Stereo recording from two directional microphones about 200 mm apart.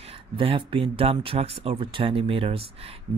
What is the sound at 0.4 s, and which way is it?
Speech, 25° right (ahead or behind).